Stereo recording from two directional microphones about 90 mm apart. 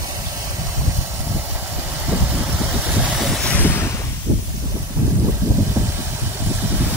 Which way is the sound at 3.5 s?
20° left (ahead or behind).